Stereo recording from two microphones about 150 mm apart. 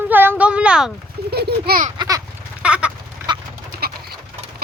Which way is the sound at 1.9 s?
25° right (ahead or behind).